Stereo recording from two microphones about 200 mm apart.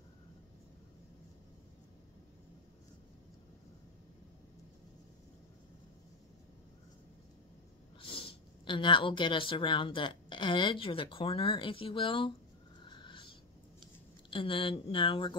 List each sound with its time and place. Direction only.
8.0 s speech: 25° left (ahead or behind)
12.8 s a sound: 25° left (ahead or behind)
14.3 s speech: 25° left (ahead or behind)